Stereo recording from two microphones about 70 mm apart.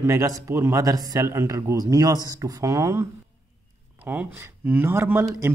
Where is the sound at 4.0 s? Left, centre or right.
Right.